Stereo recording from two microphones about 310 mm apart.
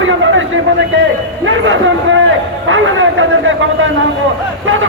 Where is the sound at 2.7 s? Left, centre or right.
Right.